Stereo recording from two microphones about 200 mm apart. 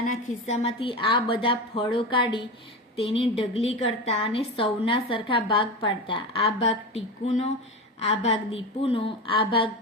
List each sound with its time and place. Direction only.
0.4 s a woman's voice: 30° left (ahead or behind)